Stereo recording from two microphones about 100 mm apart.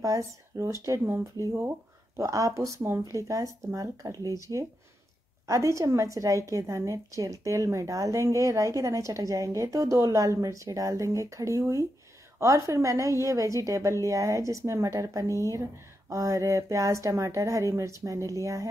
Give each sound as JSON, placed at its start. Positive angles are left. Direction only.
{"t": 0.0, "sound": "a woman's voice", "side_deg": -30}
{"t": 5.5, "sound": "a woman's voice", "side_deg": -30}